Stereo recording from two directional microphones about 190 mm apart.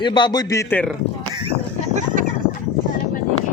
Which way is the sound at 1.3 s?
30° right (ahead or behind).